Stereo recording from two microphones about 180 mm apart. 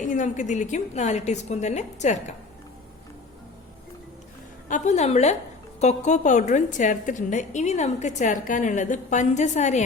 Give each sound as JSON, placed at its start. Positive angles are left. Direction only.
{"t": 0.1, "sound": "a woman's voice", "side_deg": 45}
{"t": 4.7, "sound": "a woman's voice", "side_deg": 40}